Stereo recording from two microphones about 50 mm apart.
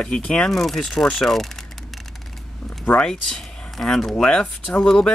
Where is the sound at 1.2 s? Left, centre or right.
Centre.